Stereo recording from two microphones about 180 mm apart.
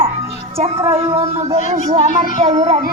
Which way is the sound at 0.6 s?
30° right (ahead or behind).